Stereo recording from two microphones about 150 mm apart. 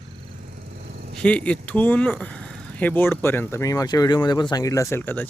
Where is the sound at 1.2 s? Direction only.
10° left (ahead or behind).